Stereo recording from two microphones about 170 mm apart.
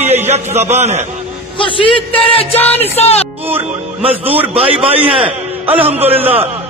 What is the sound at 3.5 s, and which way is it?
Speech, 35° right (ahead or behind).